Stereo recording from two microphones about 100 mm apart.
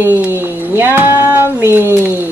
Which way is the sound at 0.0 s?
20° right (ahead or behind).